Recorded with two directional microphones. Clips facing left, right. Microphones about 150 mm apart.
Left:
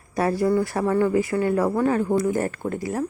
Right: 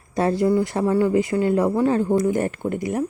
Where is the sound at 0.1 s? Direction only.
25° right (ahead or behind).